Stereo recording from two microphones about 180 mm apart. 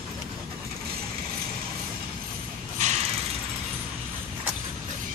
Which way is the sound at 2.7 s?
40° right (ahead or behind).